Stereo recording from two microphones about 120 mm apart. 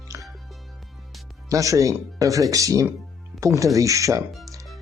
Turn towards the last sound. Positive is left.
turn(degrees=-30)  # may be behind; listen again after turning